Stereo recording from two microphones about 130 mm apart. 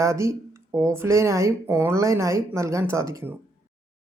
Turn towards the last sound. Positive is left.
turn(degrees=-25)  # may be behind; listen again after turning